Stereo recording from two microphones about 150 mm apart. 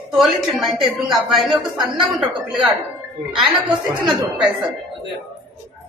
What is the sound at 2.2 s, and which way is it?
Speech, centre (ahead or behind).